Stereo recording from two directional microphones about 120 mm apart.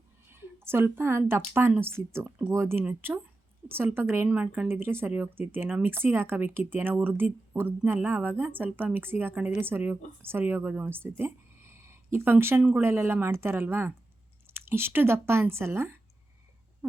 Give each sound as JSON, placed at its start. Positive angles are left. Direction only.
{"t": 0.3, "sound": "a woman's voice", "side_deg": -20}